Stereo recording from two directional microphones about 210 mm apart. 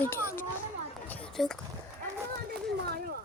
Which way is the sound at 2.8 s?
45° right (ahead or behind).